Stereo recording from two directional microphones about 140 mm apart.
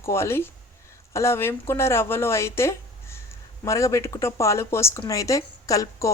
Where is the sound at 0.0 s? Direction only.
20° left (ahead or behind).